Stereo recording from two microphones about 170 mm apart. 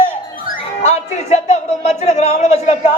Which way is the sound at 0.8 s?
40° left (ahead or behind).